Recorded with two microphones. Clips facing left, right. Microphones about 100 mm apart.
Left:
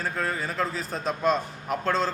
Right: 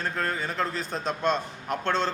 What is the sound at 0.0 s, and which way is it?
A man's voice, 5° left (ahead or behind).